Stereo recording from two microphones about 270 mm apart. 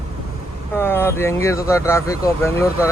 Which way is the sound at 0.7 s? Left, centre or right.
Centre.